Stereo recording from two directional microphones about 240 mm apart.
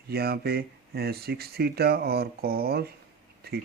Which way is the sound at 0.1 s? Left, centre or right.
Right.